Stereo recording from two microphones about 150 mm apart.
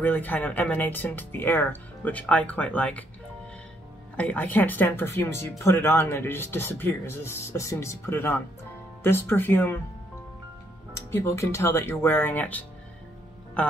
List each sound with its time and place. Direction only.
0.0 s speech: 10° left (ahead or behind)
4.2 s speech: 10° left (ahead or behind)
10.9 s speech: 20° left (ahead or behind)